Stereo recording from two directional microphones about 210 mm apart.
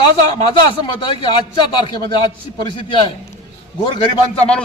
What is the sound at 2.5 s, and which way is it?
Speech, 25° left (ahead or behind).